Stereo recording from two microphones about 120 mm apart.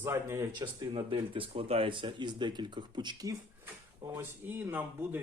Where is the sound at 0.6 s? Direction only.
45° right (ahead or behind).